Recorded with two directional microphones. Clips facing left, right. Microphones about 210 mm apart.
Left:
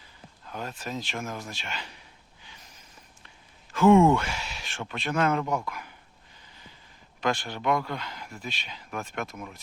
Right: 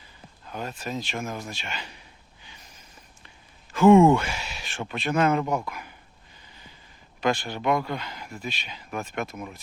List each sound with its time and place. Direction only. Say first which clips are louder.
0.4 s speech: right 2 dB; 10° right (ahead or behind)
3.2 s a sound: right 1 dB; 5° right (ahead or behind)
4.1 s speech: right 3 dB; 5° right (ahead or behind)
7.2 s speech: right 3 dB; 5° right (ahead or behind)